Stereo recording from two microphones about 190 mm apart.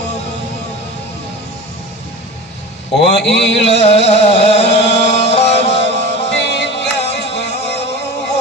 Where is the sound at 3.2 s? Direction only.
70° left (ahead or behind).